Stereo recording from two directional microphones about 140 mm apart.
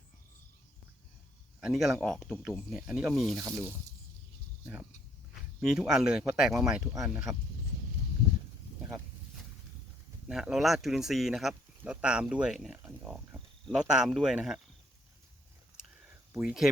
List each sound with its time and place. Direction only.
1.6 s speech: centre (ahead or behind)
3.3 s speech: 20° right (ahead or behind)
10.2 s speech: 5° right (ahead or behind)
15.8 s a sound: 5° right (ahead or behind)